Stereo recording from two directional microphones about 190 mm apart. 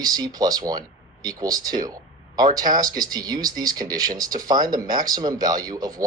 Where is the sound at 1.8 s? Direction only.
20° right (ahead or behind).